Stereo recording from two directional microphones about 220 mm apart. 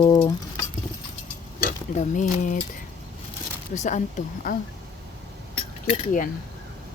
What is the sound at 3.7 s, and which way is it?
Speech, 30° left (ahead or behind).